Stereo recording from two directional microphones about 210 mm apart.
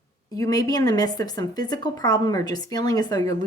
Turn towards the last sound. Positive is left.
turn(degrees=20)  # may be behind; listen again after turning